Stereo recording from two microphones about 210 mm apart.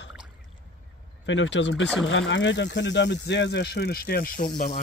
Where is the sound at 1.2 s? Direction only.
60° left (ahead or behind).